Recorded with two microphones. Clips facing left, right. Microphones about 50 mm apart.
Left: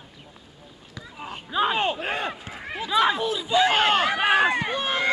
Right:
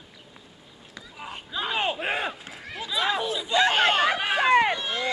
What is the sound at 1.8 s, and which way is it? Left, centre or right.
Speech, centre.